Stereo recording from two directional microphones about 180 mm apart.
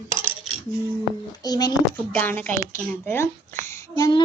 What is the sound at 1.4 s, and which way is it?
Speech, 20° left (ahead or behind).